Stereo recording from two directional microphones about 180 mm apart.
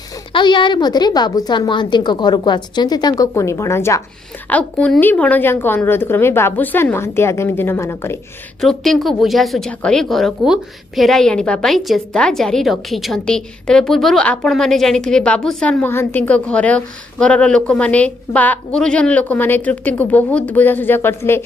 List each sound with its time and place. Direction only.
0.3 s a woman's voice: 25° left (ahead or behind)
8.5 s a woman's voice: centre (ahead or behind)